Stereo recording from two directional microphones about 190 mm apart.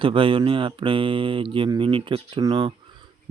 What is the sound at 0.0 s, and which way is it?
Speech, 25° right (ahead or behind).